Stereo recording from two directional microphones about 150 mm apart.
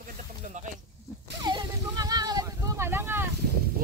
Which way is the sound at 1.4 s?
25° right (ahead or behind).